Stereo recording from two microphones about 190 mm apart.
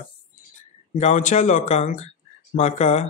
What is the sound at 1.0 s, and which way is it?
Speech, 40° left (ahead or behind).